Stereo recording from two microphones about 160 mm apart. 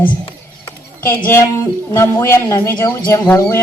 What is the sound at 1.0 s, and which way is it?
Speech, 15° left (ahead or behind).